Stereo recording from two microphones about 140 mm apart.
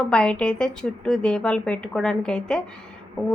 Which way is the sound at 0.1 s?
5° left (ahead or behind).